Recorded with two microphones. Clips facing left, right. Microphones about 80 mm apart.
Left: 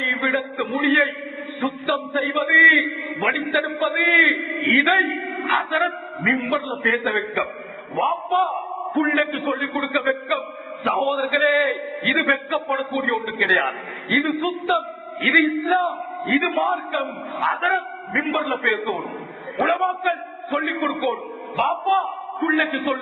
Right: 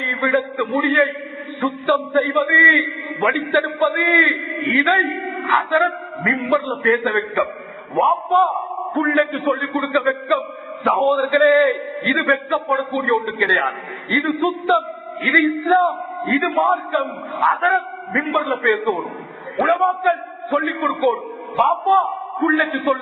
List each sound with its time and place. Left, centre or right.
0.0 s a man's voice: right
20.5 s a man's voice: right
20.7 s a man's voice: right